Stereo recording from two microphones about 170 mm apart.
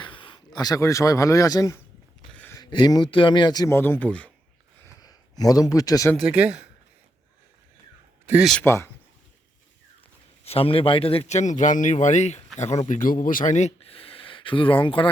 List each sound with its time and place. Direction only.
0.0 s speech: 30° left (ahead or behind)
2.3 s a sound: 10° left (ahead or behind)
2.6 s speech: 25° left (ahead or behind); by 4.3 s 10° left (ahead or behind)
4.9 s a man's voice: 20° left (ahead or behind)
6.1 s speech: 5° right (ahead or behind)
8.3 s speech: 5° right (ahead or behind)
8.5 s speech: 15° left (ahead or behind)
10.4 s speech: 35° left (ahead or behind)